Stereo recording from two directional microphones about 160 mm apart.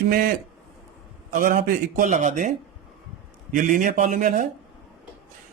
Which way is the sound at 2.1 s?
50° right (ahead or behind).